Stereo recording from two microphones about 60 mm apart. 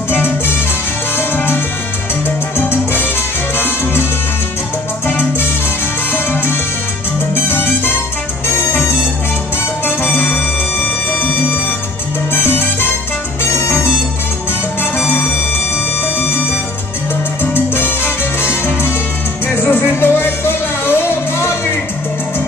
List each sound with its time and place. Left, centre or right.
0.1 s music: left
1.1 s salsa music: left
5.0 s salsa music: left
7.3 s music: left
12.3 s salsa music: left
13.4 s music: left
17.4 s salsa music: left
19.4 s music: left